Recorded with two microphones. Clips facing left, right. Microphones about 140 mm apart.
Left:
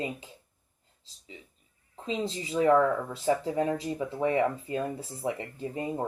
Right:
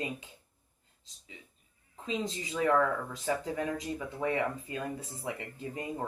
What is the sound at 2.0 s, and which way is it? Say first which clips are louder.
Speech: left 3 dB; 30° left (ahead or behind).